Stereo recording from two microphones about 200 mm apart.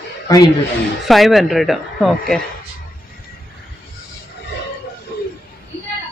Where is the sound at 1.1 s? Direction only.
Centre (ahead or behind).